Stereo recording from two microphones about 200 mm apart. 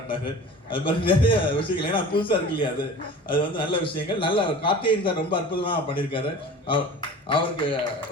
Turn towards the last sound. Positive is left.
turn(degrees=25)  # may be behind; listen again after turning